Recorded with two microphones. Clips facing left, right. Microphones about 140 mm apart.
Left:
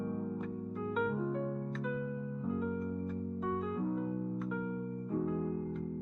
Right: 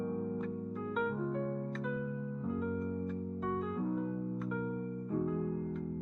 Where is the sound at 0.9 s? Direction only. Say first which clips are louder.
Left 1 dB; centre (ahead or behind).